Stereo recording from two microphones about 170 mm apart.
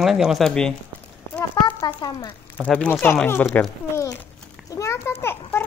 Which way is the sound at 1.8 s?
25° left (ahead or behind).